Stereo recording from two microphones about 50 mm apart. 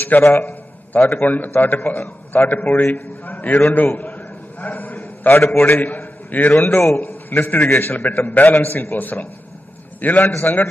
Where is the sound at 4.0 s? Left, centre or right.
Left.